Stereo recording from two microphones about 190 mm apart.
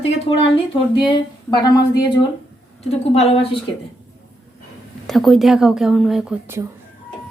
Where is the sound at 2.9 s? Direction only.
30° left (ahead or behind).